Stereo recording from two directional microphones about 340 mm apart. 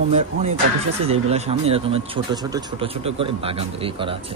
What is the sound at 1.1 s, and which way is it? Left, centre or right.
Speech, centre.